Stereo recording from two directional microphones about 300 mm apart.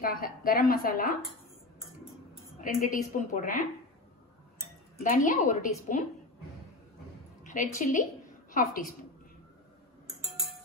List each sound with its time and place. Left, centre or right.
0.0 s a woman's voice: left
2.6 s a woman's voice: left
5.0 s a woman's voice: left
7.4 s a sound: left
7.8 s a woman's voice: left